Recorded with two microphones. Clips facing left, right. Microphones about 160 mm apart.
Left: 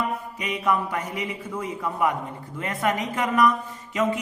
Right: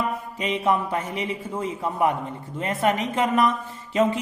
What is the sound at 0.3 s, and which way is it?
A man's voice, 25° right (ahead or behind).